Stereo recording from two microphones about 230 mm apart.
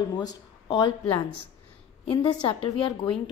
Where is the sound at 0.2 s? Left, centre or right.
Centre.